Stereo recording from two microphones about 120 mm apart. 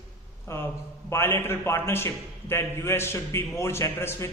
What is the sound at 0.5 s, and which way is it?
A man's voice, 20° left (ahead or behind).